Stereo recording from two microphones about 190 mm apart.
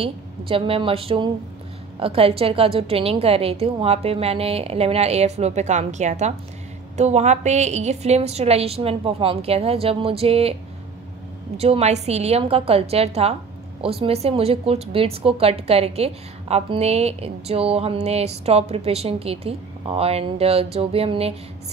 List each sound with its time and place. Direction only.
0.0 s a woman's voice: 30° right (ahead or behind)
11.5 s a woman's voice: 30° right (ahead or behind)